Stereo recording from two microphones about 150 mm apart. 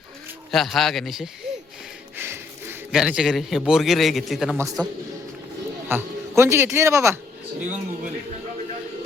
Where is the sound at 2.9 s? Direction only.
5° right (ahead or behind).